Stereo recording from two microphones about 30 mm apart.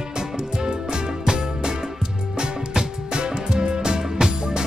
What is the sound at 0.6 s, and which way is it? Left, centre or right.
Music, right.